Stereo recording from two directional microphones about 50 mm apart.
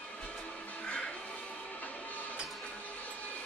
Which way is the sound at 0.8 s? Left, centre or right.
Left.